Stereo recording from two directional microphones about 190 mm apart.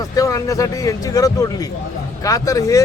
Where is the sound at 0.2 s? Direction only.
20° left (ahead or behind).